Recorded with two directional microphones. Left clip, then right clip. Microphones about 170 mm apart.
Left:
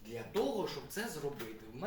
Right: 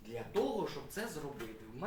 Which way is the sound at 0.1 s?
20° right (ahead or behind).